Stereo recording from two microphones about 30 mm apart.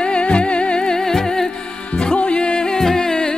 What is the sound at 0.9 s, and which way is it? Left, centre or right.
Music, centre.